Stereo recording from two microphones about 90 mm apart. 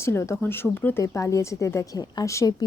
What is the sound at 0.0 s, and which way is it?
A woman's voice, 30° left (ahead or behind).